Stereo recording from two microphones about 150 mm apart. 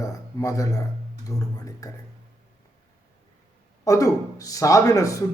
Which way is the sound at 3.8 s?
20° left (ahead or behind).